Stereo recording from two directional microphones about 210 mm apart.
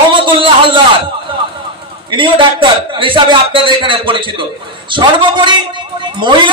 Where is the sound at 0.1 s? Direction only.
25° right (ahead or behind).